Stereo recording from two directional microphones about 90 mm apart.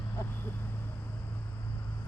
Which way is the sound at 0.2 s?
25° left (ahead or behind).